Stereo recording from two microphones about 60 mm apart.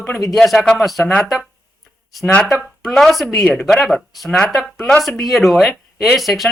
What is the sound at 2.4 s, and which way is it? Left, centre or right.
Speech, centre.